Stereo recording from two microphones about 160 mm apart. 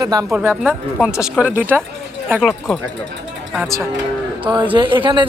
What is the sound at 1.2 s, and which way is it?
Speech, 10° right (ahead or behind).